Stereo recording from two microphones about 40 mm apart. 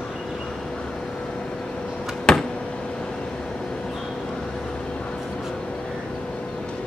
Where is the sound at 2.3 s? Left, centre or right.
Left.